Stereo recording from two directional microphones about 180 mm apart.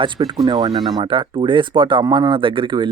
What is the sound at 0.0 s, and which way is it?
Speech, 25° right (ahead or behind).